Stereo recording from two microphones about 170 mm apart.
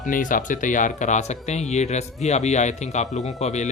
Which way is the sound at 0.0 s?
50° left (ahead or behind).